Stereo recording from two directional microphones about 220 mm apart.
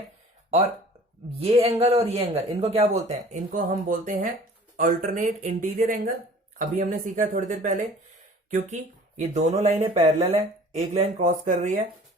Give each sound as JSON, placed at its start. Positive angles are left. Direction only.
{"t": 1.4, "sound": "a man's voice", "side_deg": -25}